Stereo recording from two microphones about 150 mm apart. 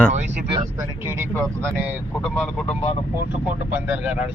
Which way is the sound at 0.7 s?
15° right (ahead or behind).